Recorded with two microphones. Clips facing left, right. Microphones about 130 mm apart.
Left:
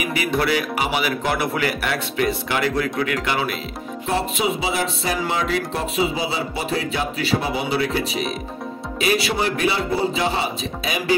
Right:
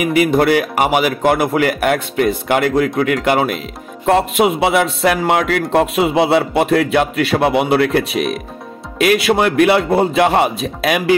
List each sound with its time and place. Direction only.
0.0 s a man's voice: 50° right (ahead or behind)